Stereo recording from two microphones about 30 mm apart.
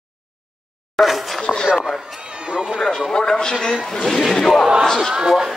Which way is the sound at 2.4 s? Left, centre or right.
Right.